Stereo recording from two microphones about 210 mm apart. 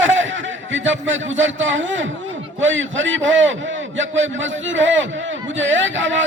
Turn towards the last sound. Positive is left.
turn(degrees=-65)  # may be behind; listen again after turning